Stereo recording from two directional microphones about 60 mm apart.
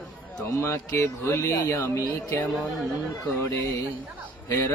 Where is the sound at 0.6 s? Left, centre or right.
Left.